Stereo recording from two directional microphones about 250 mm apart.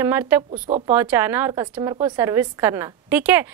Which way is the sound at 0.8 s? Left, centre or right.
Centre.